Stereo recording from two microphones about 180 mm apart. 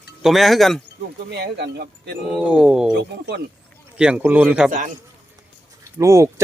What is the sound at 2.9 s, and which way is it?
Speech, 70° right (ahead or behind).